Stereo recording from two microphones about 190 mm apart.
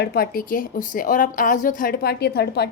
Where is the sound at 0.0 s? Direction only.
55° left (ahead or behind).